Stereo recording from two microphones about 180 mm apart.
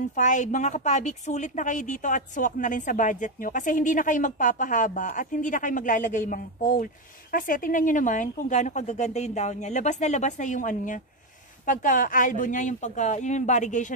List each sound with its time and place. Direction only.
0.1 s a woman's voice: 45° left (ahead or behind)